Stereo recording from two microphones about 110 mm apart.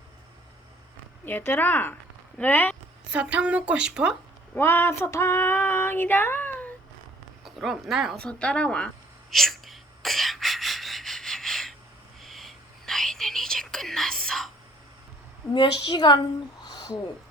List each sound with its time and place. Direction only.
1.2 s speech: 20° left (ahead or behind)
3.1 s a woman's voice: 10° right (ahead or behind)
4.5 s female singing: 20° left (ahead or behind)
7.4 s speech: centre (ahead or behind)
9.3 s gasp: centre (ahead or behind)
12.2 s whispering: centre (ahead or behind)
15.5 s a woman's voice: 45° left (ahead or behind)
16.6 s a sound: 35° left (ahead or behind)